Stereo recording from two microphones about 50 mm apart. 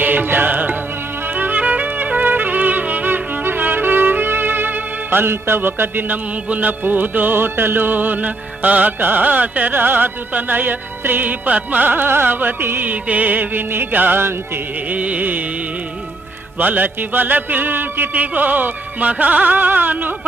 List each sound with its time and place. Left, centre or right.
0.0 s music: right
5.2 s music: right
12.8 s music: right
14.8 s carnatic music: right
16.6 s music: right